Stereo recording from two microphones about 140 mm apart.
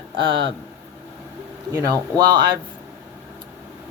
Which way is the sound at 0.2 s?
35° right (ahead or behind).